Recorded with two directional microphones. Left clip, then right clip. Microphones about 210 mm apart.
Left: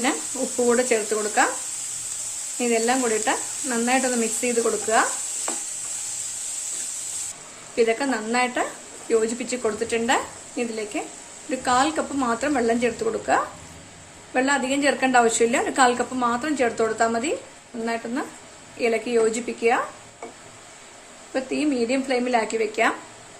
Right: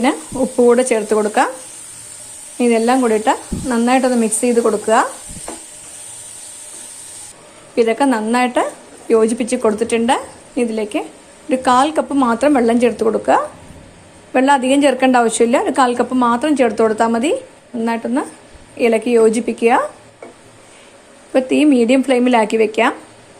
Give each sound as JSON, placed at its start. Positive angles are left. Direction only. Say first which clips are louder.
{"t": 0.5, "sound": "a woman's voice", "louder": "right 8 dB", "side_deg": -30}
{"t": 2.6, "sound": "speech", "louder": "right 8 dB", "side_deg": -35}
{"t": 7.8, "sound": "a woman's voice", "louder": "right 7 dB", "side_deg": -30}
{"t": 21.3, "sound": "a woman's voice", "louder": "right 11 dB", "side_deg": -40}